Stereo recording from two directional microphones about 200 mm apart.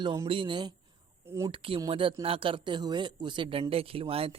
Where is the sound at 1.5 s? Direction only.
25° right (ahead or behind).